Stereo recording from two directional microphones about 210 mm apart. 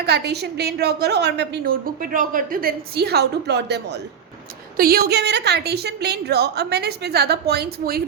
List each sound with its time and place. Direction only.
0.0 s a woman's voice: 50° right (ahead or behind)